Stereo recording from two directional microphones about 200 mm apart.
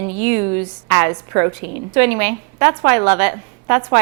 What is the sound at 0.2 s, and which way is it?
A woman's voice, 10° right (ahead or behind).